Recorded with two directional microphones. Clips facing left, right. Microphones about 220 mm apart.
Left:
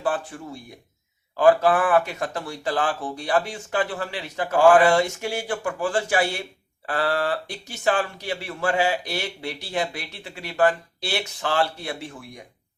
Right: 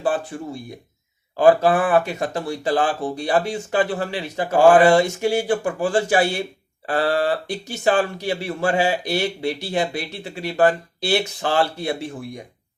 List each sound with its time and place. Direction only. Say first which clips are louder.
0.3 s speech: right 6 dB; 30° right (ahead or behind)